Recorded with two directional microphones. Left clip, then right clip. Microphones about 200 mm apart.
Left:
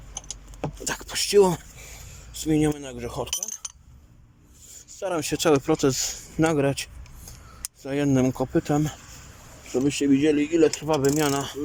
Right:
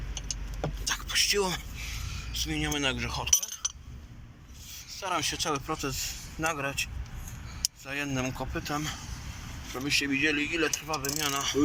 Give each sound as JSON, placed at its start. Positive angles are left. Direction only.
{"t": 0.9, "sound": "speech", "side_deg": 55}
{"t": 4.9, "sound": "speech", "side_deg": 50}